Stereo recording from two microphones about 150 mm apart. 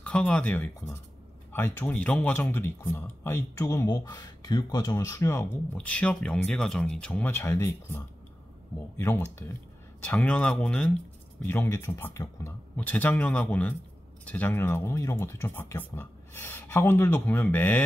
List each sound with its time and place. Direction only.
0.0 s speech: 10° left (ahead or behind)